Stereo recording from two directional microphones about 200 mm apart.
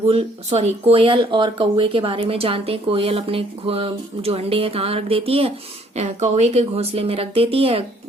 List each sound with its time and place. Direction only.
0.1 s speech: 30° right (ahead or behind)